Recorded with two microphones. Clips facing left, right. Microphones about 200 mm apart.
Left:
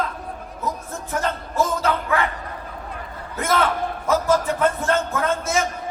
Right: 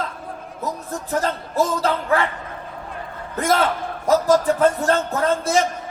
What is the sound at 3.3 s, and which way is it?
Speech, 35° right (ahead or behind).